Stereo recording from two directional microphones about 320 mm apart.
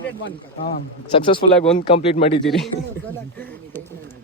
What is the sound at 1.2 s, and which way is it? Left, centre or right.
Speech, centre.